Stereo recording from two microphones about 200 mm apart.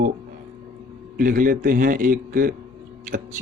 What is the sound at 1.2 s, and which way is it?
A man's voice, 45° right (ahead or behind).